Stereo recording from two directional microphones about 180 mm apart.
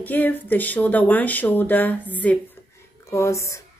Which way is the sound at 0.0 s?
10° left (ahead or behind).